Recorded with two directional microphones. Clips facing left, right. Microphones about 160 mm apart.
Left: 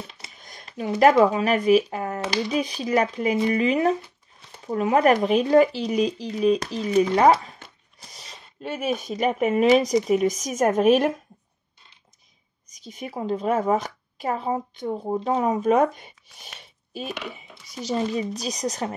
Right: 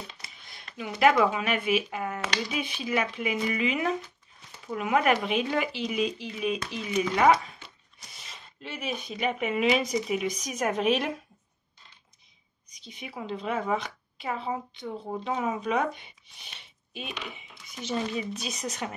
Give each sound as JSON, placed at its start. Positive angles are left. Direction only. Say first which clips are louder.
{"t": 0.4, "sound": "a sound", "louder": "left 7 dB", "side_deg": 40}
{"t": 1.2, "sound": "speech", "louder": "left 7 dB", "side_deg": 40}
{"t": 12.6, "sound": "a woman's voice", "louder": "left 7 dB", "side_deg": 45}